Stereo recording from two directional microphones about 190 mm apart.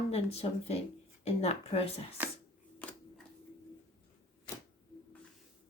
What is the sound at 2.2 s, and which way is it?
Speech, 10° right (ahead or behind).